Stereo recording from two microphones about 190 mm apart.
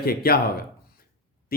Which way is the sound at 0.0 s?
50° left (ahead or behind).